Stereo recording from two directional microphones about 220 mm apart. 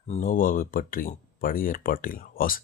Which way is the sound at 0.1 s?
35° left (ahead or behind).